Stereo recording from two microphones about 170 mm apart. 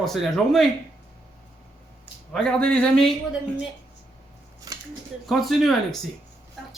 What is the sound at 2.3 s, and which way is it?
Speech, 5° left (ahead or behind).